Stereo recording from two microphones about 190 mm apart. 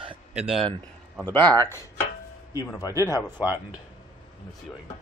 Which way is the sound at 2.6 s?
20° left (ahead or behind).